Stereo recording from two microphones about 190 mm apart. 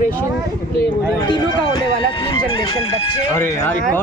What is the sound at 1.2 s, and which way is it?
Speech, 25° left (ahead or behind).